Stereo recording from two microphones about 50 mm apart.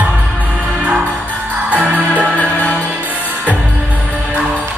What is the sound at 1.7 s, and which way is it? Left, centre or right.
Music, right.